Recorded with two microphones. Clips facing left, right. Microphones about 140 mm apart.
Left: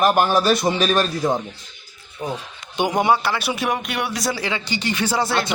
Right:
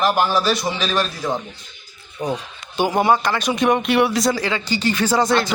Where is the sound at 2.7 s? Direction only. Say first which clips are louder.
Right 1 dB; 15° left (ahead or behind); by 4.4 s centre (ahead or behind).